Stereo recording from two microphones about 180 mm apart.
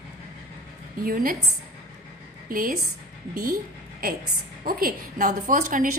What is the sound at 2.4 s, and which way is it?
A woman's voice, 50° right (ahead or behind).